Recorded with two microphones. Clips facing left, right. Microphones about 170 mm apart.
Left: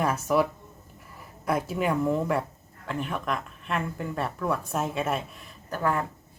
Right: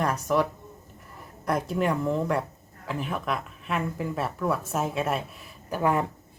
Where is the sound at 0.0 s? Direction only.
5° left (ahead or behind).